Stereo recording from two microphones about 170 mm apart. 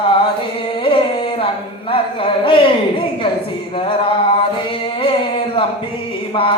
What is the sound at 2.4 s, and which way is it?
Speech, 30° left (ahead or behind).